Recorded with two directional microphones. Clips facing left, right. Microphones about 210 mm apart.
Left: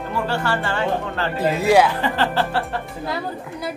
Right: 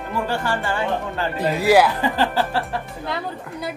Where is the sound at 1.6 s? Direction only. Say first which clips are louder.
Right 1 dB; 5° right (ahead or behind).